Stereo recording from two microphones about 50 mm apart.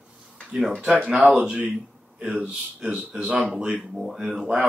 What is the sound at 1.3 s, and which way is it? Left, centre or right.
Speech, right.